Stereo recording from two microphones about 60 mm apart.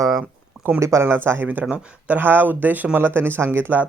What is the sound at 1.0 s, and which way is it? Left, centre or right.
Speech, right.